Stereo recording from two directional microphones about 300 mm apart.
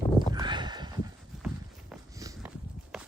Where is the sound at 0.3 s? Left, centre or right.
Centre.